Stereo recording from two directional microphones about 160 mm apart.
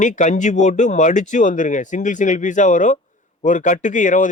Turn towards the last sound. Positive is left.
turn(degrees=50)  # may be behind; listen again after turning